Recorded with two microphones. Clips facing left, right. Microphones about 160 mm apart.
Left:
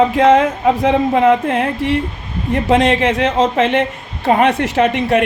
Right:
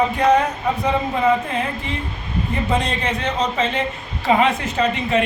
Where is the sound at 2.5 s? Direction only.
90° left.